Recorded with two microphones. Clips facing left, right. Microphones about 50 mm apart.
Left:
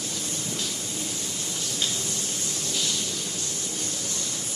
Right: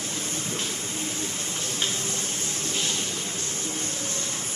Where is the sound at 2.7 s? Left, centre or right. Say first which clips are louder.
Even; right.